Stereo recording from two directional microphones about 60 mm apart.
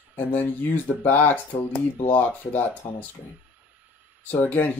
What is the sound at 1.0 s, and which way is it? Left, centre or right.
Speech, left.